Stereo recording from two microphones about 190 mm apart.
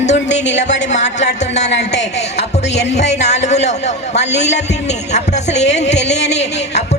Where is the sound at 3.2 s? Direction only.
35° left (ahead or behind).